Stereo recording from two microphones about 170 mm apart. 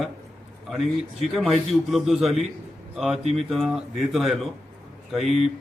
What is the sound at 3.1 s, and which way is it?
Speech, 40° right (ahead or behind).